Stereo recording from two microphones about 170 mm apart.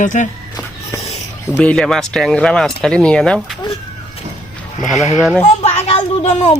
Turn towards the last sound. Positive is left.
turn(degrees=40)  # may be behind; listen again after turning